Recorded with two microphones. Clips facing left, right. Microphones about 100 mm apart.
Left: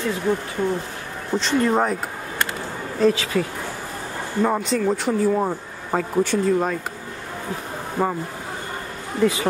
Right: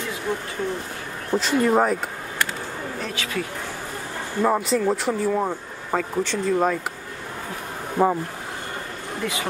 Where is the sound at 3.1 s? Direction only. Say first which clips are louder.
Left 5 dB; 30° left (ahead or behind).